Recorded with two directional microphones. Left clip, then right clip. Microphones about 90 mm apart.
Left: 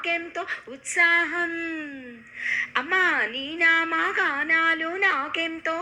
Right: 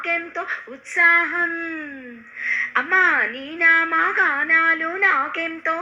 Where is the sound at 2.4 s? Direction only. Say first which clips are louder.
Right 4 dB; 25° left (ahead or behind).